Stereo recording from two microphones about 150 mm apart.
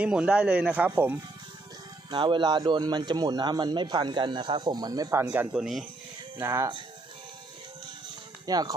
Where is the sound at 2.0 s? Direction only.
30° right (ahead or behind).